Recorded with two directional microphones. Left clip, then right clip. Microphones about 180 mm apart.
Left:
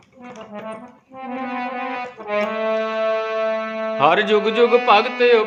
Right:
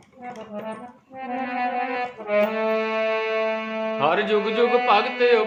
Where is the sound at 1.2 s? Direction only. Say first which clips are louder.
Even; 25° left (ahead or behind).